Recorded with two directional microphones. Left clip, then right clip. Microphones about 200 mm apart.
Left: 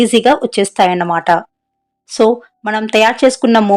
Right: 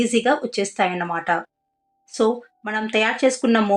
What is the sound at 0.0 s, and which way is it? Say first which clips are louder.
Speech: left 9 dB; 50° left (ahead or behind).